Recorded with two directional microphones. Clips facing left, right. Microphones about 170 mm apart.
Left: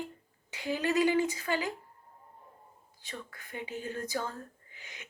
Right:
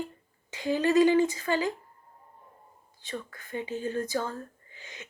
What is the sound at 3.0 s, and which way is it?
Speech, 15° left (ahead or behind).